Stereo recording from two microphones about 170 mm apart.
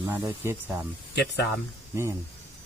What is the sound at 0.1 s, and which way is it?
Speech, 15° right (ahead or behind).